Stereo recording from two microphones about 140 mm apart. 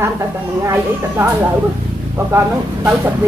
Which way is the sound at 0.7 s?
20° right (ahead or behind).